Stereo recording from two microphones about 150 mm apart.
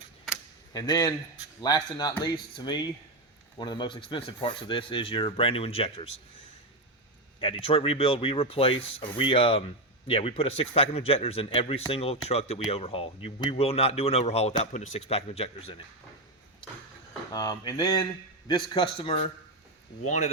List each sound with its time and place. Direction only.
0.7 s speech: 25° left (ahead or behind)
7.4 s speech: 35° left (ahead or behind)
17.3 s speech: 25° left (ahead or behind)